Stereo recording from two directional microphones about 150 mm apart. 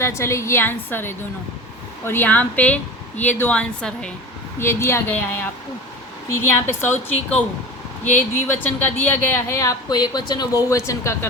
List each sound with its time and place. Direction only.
0.0 s a woman's voice: 20° left (ahead or behind)
4.6 s a woman's voice: 15° left (ahead or behind)